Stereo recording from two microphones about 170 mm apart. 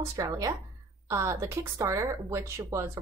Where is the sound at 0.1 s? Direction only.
20° right (ahead or behind).